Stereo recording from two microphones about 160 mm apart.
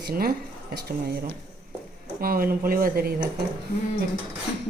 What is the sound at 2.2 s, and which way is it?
Speech, 65° right (ahead or behind).